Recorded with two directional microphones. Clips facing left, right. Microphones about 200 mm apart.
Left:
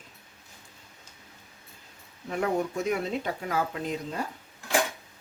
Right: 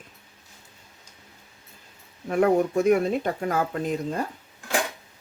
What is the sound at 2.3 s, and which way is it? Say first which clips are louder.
Speech: right 7 dB; 50° right (ahead or behind).